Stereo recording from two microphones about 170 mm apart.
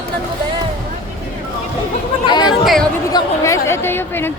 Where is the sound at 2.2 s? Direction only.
25° left (ahead or behind).